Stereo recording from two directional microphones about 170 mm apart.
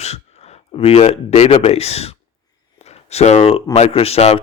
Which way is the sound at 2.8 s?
40° left (ahead or behind).